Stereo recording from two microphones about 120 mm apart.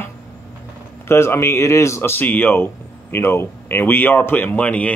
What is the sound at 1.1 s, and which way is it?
Speech, 20° left (ahead or behind).